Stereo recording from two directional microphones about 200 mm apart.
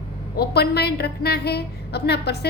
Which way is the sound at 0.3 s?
50° left (ahead or behind).